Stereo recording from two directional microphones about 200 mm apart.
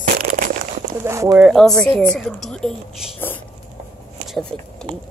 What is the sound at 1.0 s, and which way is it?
Speech, 15° right (ahead or behind).